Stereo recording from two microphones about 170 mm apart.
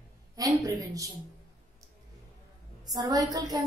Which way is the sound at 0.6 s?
20° right (ahead or behind).